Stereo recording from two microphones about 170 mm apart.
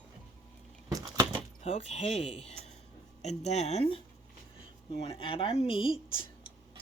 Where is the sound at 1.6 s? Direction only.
40° left (ahead or behind).